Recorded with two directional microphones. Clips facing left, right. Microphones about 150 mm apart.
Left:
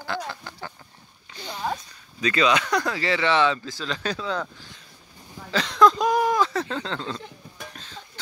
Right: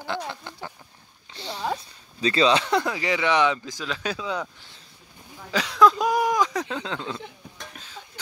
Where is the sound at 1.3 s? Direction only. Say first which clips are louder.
Right 1 dB; 30° right (ahead or behind).